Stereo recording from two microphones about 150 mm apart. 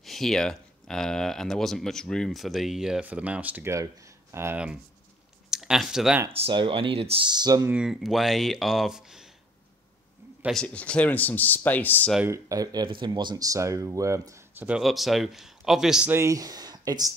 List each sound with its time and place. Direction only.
0.0 s speech: centre (ahead or behind)
6.3 s speech: 35° right (ahead or behind)
7.6 s speech: 5° right (ahead or behind)
10.5 s speech: 5° left (ahead or behind)
12.3 s speech: 25° right (ahead or behind)
14.7 s speech: centre (ahead or behind)
16.1 s speech: 20° right (ahead or behind)